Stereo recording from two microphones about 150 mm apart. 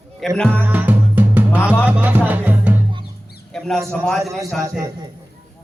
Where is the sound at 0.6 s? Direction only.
10° right (ahead or behind).